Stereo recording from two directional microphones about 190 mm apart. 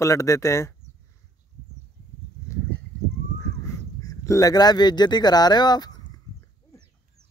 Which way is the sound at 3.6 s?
15° left (ahead or behind).